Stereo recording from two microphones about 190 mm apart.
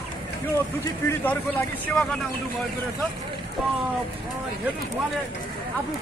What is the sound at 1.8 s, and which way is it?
Speech, 5° left (ahead or behind).